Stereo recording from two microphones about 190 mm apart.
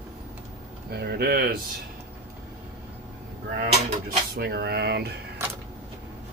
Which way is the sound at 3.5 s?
55° right (ahead or behind).